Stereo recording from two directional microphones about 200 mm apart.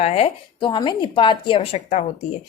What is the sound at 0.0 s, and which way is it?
A woman's voice, 30° left (ahead or behind).